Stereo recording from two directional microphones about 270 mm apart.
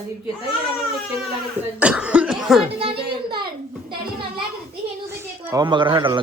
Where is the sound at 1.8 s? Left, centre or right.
Centre.